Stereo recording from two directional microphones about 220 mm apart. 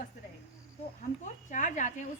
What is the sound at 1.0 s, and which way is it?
Speech, 35° left (ahead or behind).